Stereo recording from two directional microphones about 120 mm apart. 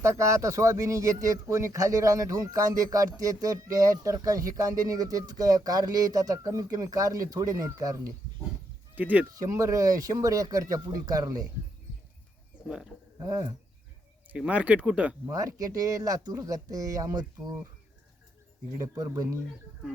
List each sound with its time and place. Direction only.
0.0 s speech: 25° right (ahead or behind)
9.0 s speech: 15° right (ahead or behind)
9.3 s speech: 30° right (ahead or behind)
12.6 s speech: 5° right (ahead or behind)
13.1 s speech: 30° right (ahead or behind)
14.3 s speech: 10° right (ahead or behind)
15.3 s speech: 25° right (ahead or behind)
18.9 s speech: 30° right (ahead or behind)